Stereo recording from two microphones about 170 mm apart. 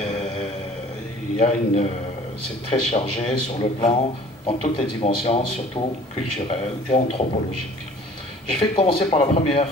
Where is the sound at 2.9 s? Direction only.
40° left (ahead or behind).